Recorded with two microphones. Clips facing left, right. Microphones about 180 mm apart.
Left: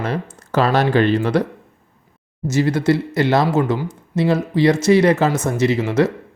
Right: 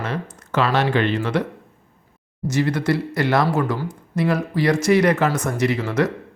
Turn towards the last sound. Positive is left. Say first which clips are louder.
# left 4 dB
turn(degrees=25)  # may be behind; listen again after turning